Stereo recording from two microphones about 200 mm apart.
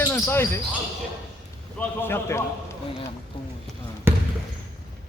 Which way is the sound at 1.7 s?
10° left (ahead or behind).